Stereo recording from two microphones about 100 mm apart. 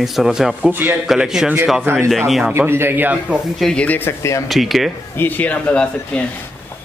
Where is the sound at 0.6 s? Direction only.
15° right (ahead or behind).